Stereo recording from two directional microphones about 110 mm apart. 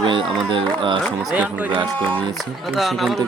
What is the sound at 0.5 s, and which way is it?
Speech, 50° right (ahead or behind).